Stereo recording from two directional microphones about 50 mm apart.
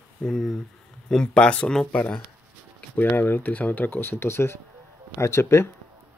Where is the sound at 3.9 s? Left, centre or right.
Left.